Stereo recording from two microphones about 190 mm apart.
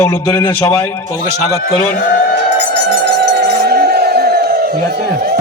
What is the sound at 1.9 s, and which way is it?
Speech, 55° left (ahead or behind).